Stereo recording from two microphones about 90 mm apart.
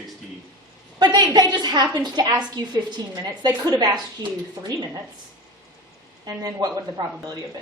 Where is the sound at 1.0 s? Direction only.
50° right (ahead or behind).